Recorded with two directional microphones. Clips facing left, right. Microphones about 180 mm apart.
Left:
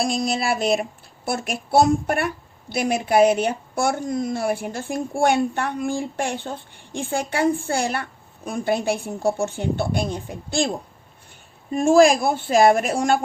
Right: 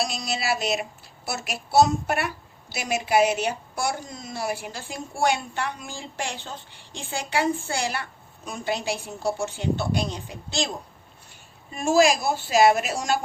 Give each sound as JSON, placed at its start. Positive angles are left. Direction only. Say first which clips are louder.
{"t": 0.0, "sound": "a child's voice", "louder": "left 6 dB", "side_deg": 50}
{"t": 11.7, "sound": "a child's voice", "louder": "left 5 dB", "side_deg": 55}